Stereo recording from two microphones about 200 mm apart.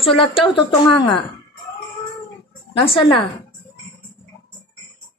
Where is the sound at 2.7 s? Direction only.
25° left (ahead or behind).